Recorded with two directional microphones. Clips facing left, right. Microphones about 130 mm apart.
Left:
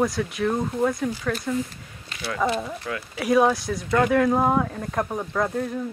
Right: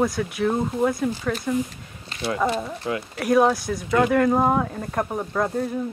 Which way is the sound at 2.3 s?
5° right (ahead or behind).